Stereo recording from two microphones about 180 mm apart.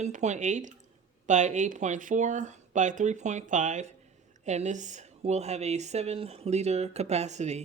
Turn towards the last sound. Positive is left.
turn(degrees=-40)  # may be behind; listen again after turning